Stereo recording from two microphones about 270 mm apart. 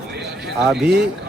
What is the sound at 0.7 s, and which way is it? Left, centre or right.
Speech, centre.